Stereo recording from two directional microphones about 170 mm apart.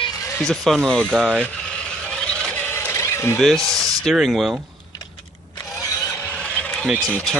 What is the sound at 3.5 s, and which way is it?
Speech, 20° right (ahead or behind).